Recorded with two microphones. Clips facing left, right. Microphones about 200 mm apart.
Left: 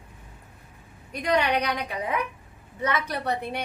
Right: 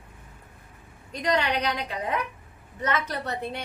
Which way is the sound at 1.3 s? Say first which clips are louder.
Left 3 dB; 15° left (ahead or behind).